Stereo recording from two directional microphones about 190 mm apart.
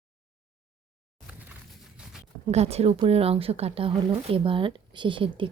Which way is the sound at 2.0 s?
5° right (ahead or behind).